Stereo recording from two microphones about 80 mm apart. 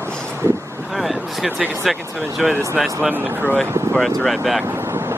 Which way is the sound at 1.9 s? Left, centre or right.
Centre.